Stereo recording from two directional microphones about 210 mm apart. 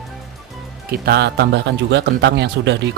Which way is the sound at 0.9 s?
50° right (ahead or behind).